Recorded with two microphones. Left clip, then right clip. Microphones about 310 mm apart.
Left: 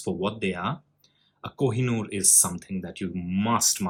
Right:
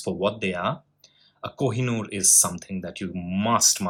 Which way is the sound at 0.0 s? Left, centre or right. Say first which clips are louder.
Right 3 dB; centre.